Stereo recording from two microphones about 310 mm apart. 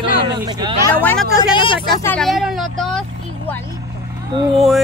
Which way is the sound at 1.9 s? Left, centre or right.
Centre.